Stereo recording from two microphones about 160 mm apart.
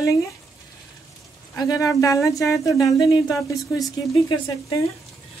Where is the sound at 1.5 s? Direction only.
25° left (ahead or behind).